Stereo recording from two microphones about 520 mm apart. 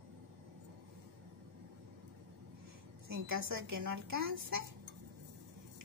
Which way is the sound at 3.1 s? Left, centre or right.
Right.